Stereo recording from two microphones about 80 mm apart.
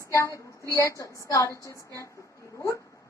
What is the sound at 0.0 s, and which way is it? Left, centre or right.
A woman's voice, left.